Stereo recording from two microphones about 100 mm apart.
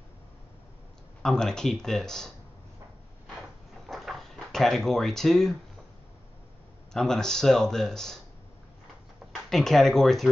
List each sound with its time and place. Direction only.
1.2 s a man's voice: 5° left (ahead or behind)
3.8 s a sound: centre (ahead or behind)
6.9 s a man's voice: 5° left (ahead or behind)
9.5 s a man's voice: 5° left (ahead or behind)